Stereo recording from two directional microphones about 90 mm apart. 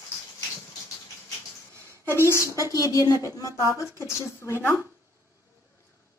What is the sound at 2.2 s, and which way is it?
Speech, 35° left (ahead or behind).